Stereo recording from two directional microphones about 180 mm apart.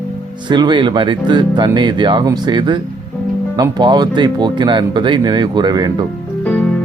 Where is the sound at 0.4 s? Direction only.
25° right (ahead or behind).